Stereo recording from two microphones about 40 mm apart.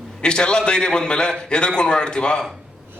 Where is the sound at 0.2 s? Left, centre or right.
Left.